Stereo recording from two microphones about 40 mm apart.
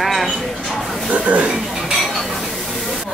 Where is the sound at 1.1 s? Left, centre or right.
Right.